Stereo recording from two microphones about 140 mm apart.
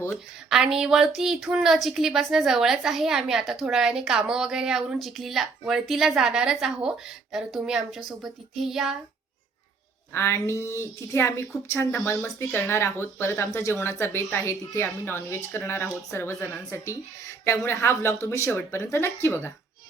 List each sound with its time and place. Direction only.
0.5 s a woman's voice: 5° right (ahead or behind)
10.1 s speech: 20° left (ahead or behind)